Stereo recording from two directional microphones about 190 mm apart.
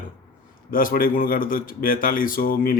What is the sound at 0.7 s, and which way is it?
A man's voice, 45° left (ahead or behind).